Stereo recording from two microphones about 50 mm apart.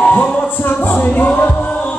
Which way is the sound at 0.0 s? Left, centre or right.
Left.